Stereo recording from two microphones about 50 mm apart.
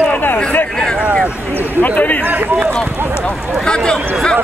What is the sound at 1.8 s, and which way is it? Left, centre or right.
Speech, left.